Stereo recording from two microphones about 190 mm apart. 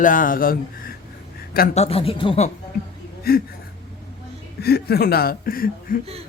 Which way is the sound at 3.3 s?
50° left (ahead or behind).